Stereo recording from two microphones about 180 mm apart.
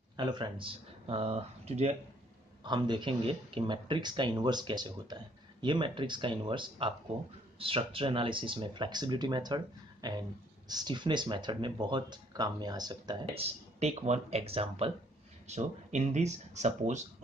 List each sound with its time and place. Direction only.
0.2 s speech: 25° right (ahead or behind)